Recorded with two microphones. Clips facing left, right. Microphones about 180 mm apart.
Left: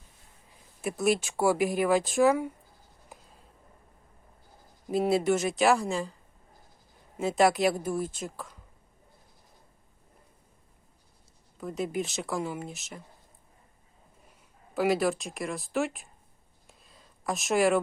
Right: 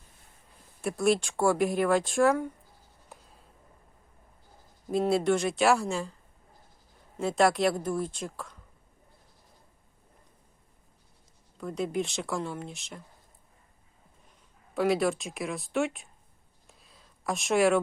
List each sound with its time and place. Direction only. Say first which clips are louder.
0.8 s speech: right 1 dB; centre (ahead or behind)
4.9 s speech: even; centre (ahead or behind)
7.2 s speech: left 1 dB; centre (ahead or behind)
11.5 s speech: right 1 dB; centre (ahead or behind)
14.8 s speech: even; centre (ahead or behind)
16.6 s a sound: left 1 dB; centre (ahead or behind)